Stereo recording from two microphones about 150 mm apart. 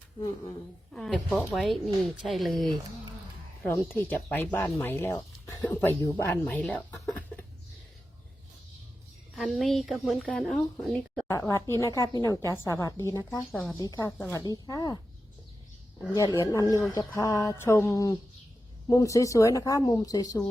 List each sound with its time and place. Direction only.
0.9 s a woman's voice: 5° left (ahead or behind)
4.3 s speech: 15° left (ahead or behind)
9.3 s a woman's voice: centre (ahead or behind)
11.3 s speech: 20° left (ahead or behind)
13.5 s a woman's voice: centre (ahead or behind)
13.7 s speech: 25° left (ahead or behind)
16.1 s speech: 20° left (ahead or behind)